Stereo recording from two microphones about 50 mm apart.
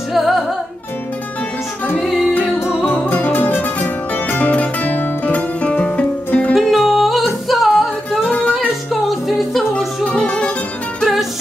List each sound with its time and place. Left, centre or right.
0.1 s music: centre
2.0 s music: centre
2.9 s music: left
4.4 s music: left
6.5 s music: centre
10.0 s music: left
11.0 s music: centre